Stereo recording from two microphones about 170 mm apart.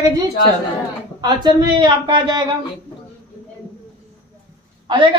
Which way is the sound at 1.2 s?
25° right (ahead or behind).